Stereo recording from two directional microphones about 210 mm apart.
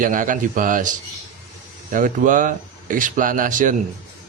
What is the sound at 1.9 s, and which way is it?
Speech, 40° right (ahead or behind).